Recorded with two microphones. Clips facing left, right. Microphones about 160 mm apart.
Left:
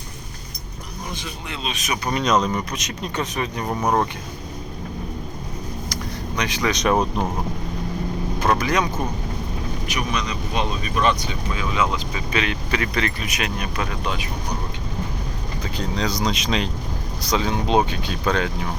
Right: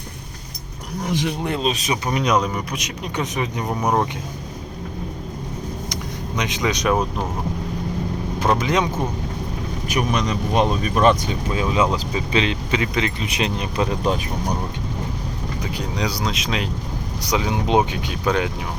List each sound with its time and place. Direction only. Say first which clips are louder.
1.0 s speech: right 10 dB; 75° right (ahead or behind)
1.5 s speech: right 2 dB; 40° right (ahead or behind)
2.0 s speech: left 1 dB; 10° right (ahead or behind)
5.9 s vehicle: right 1 dB; 20° right (ahead or behind)
8.4 s speech: right 1 dB; 20° right (ahead or behind)
9.9 s speech: right 6 dB; 45° right (ahead or behind)
11.6 s speech: right 3 dB; 35° right (ahead or behind)
15.8 s speech: left 2 dB; 10° right (ahead or behind)